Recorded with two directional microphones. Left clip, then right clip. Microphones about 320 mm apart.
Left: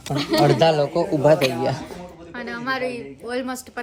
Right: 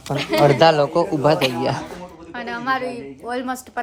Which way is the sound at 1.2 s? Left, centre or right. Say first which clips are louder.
Left 4 dB; centre.